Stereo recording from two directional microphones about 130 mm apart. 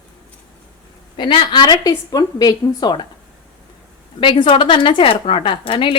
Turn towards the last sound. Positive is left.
turn(degrees=45)  # may be behind; listen again after turning